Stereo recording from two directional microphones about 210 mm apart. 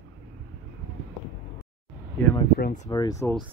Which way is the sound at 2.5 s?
45° left (ahead or behind).